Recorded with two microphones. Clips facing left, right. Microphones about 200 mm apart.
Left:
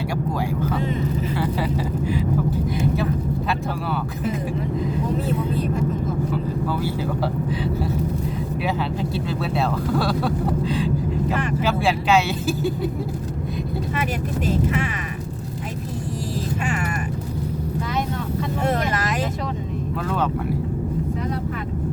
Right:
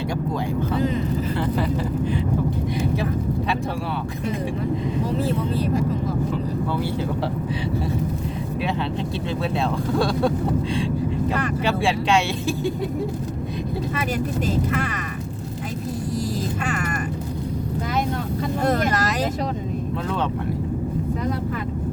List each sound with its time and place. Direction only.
2.7 s vehicle: centre (ahead or behind)
9.4 s speech: 5° left (ahead or behind)
11.3 s vehicle: centre (ahead or behind)
18.6 s vehicle: 40° right (ahead or behind)